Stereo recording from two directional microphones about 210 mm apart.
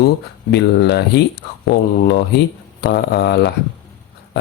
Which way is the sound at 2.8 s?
50° left (ahead or behind).